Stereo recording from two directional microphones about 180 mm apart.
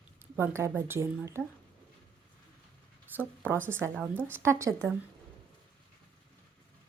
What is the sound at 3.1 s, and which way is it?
Speech, 10° right (ahead or behind).